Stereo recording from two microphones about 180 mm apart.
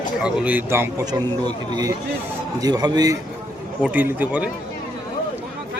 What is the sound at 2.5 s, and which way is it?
Speech, 20° right (ahead or behind).